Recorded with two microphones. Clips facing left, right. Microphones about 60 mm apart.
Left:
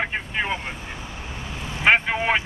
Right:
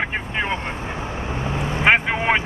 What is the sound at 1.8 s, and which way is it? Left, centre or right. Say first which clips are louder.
Vehicle: right 1 dB; centre.